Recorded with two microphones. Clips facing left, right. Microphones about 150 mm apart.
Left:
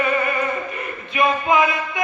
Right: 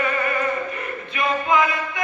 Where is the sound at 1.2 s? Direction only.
15° left (ahead or behind).